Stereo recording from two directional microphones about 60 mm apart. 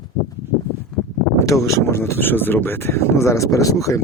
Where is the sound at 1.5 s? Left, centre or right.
Left.